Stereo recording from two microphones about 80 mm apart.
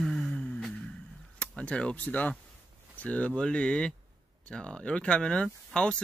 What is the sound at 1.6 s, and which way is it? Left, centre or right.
Speech, centre.